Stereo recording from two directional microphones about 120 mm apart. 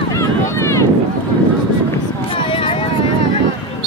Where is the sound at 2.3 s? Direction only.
50° left (ahead or behind).